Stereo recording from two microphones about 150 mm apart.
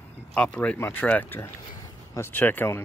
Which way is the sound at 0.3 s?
10° left (ahead or behind).